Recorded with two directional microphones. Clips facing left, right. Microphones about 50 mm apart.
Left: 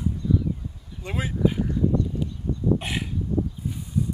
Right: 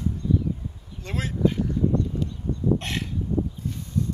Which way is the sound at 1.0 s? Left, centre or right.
Centre.